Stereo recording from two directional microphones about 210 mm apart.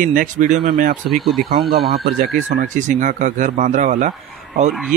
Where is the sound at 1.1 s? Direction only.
Centre (ahead or behind).